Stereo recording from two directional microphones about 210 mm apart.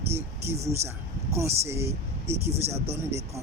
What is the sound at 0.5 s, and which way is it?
Speech, 30° right (ahead or behind).